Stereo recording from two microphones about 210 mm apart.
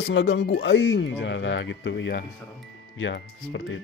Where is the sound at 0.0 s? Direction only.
65° left (ahead or behind).